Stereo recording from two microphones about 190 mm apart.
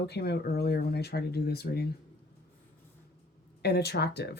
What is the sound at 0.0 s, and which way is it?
Speech, 60° left (ahead or behind).